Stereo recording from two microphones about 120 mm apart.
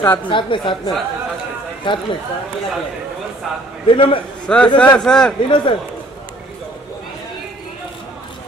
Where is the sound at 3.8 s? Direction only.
45° left (ahead or behind).